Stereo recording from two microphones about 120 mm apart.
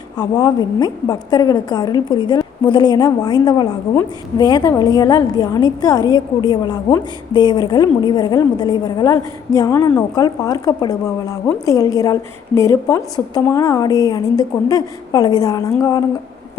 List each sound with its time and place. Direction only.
0.2 s a woman's voice: 35° left (ahead or behind)